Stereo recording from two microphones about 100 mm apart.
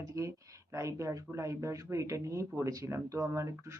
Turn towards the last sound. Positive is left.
turn(degrees=-30)  # may be behind; listen again after turning